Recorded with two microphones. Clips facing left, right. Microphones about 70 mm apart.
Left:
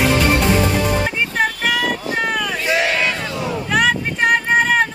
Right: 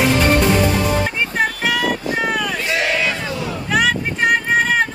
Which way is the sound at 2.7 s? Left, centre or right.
Left.